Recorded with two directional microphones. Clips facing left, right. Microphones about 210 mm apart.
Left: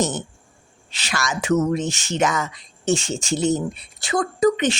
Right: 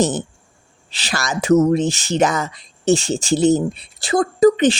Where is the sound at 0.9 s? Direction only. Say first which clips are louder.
Right 2 dB; 35° right (ahead or behind).